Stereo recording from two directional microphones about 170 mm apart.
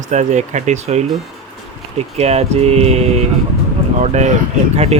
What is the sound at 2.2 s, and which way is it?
Speech, 40° right (ahead or behind).